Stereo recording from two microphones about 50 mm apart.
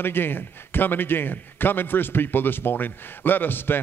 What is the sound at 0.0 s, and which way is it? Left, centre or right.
A man's voice, left.